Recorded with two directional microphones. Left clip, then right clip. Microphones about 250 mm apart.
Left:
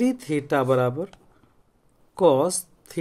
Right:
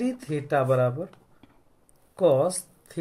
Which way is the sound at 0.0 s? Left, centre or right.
Left.